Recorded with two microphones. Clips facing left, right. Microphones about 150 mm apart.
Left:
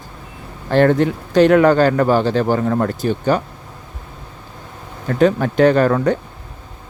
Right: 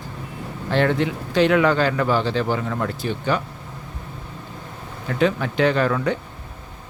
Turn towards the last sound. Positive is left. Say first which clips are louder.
# left 6 dB
turn(degrees=45)  # may be behind; listen again after turning